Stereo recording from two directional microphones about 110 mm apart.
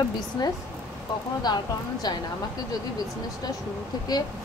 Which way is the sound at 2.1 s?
40° left (ahead or behind).